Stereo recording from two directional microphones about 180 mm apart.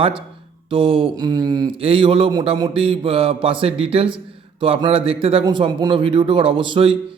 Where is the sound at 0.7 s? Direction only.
30° right (ahead or behind).